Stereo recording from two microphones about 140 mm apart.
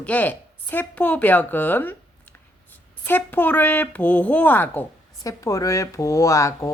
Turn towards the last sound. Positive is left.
turn(degrees=20)  # may be behind; listen again after turning